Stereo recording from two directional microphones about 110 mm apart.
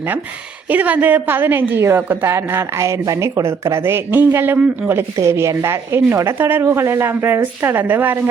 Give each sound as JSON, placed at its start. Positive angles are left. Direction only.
{"t": 0.7, "sound": "a woman's voice", "side_deg": -15}